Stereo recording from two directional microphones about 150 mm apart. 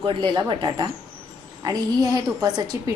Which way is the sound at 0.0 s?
35° right (ahead or behind).